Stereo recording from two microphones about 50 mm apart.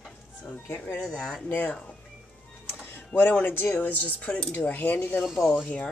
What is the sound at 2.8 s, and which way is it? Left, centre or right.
Speech, left.